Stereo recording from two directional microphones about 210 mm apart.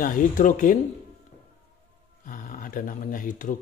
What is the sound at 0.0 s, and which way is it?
Speech, 40° left (ahead or behind).